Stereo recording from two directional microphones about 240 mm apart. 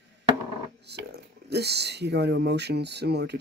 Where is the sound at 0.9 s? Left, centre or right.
Right.